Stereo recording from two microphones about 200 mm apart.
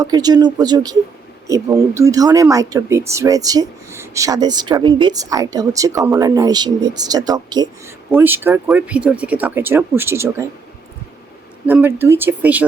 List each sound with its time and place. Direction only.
0.0 s speech: 20° right (ahead or behind)
11.6 s speech: 10° right (ahead or behind)